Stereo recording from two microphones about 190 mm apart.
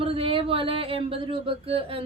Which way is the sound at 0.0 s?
30° right (ahead or behind).